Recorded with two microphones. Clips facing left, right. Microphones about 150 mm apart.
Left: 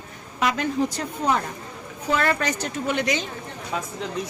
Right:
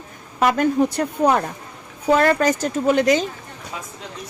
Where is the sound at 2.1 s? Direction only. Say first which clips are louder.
Right 7 dB; 40° right (ahead or behind).